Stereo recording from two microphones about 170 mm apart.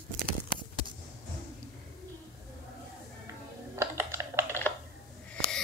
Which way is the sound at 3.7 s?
15° right (ahead or behind).